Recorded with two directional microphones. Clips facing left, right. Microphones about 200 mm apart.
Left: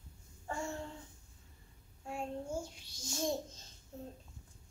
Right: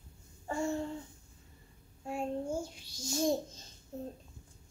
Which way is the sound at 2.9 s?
35° right (ahead or behind).